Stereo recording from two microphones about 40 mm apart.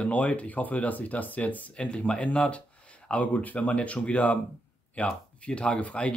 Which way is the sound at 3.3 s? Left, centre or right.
Left.